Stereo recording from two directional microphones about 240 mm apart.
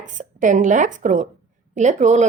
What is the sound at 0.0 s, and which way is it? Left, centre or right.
Speech, right.